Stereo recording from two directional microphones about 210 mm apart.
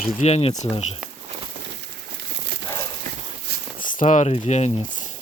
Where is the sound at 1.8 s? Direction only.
55° right (ahead or behind).